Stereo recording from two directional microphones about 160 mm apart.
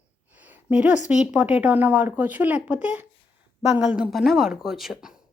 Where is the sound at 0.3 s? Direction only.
10° right (ahead or behind).